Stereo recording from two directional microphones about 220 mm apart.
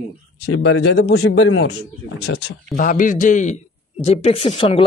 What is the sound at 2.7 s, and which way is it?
A man's voice, 35° left (ahead or behind).